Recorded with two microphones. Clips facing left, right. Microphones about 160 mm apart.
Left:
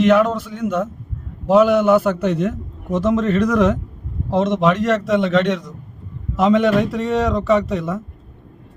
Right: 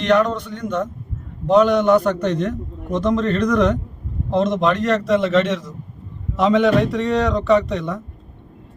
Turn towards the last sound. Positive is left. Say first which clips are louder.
# even
turn(degrees=0)  # may be behind; listen again after turning